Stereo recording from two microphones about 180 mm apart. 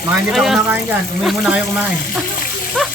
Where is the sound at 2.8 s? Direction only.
5° left (ahead or behind).